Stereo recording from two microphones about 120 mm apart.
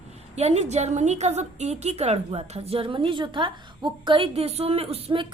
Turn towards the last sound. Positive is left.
turn(degrees=-55)  # may be behind; listen again after turning